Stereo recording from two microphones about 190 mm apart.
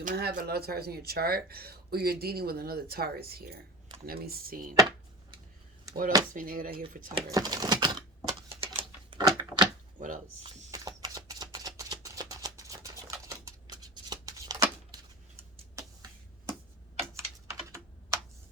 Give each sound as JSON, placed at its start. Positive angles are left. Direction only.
{"t": 0.0, "sound": "speech", "side_deg": -55}
{"t": 5.9, "sound": "speech", "side_deg": -45}
{"t": 7.1, "sound": "typewriter", "side_deg": -20}
{"t": 10.4, "sound": "a sound", "side_deg": -20}
{"t": 17.5, "sound": "computer keyboard", "side_deg": -15}